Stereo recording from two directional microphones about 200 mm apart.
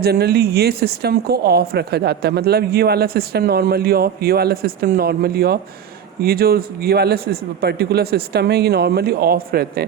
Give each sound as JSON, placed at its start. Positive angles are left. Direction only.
{"t": 0.0, "sound": "speech", "side_deg": -50}